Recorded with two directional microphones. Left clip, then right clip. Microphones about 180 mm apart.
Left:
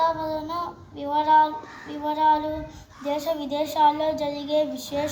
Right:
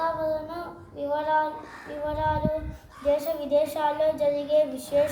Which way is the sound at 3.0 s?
10° right (ahead or behind).